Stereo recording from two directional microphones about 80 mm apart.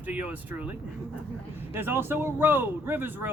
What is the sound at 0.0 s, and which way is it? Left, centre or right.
Speech, centre.